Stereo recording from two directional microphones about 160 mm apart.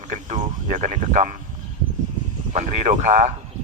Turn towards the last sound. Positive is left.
turn(degrees=-45)  # may be behind; listen again after turning